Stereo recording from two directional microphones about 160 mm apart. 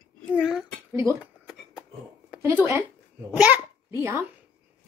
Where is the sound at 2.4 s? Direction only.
15° right (ahead or behind).